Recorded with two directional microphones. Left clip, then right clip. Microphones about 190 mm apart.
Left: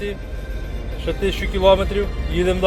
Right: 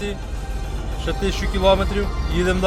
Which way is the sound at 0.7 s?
15° right (ahead or behind).